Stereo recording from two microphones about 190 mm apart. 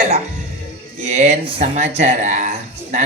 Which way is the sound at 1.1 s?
40° right (ahead or behind).